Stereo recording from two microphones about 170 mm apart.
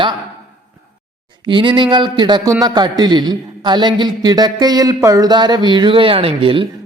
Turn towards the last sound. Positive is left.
turn(degrees=-30)  # may be behind; listen again after turning